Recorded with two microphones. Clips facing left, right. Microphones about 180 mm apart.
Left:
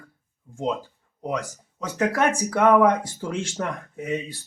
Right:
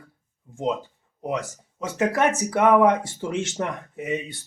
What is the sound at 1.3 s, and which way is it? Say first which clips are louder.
Speech: right 1 dB; 25° right (ahead or behind).